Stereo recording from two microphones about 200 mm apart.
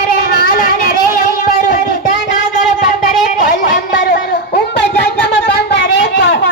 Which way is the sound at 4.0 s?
55° left (ahead or behind).